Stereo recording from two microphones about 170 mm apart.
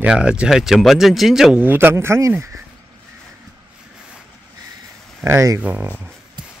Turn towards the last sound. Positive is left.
turn(degrees=-25)  # may be behind; listen again after turning